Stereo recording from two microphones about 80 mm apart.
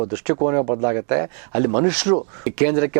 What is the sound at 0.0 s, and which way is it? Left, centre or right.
Speech, centre.